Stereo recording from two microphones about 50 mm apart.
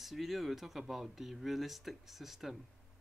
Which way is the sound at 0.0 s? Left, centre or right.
Centre.